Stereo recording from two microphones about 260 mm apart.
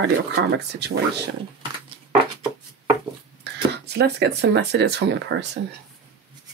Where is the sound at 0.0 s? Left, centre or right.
Right.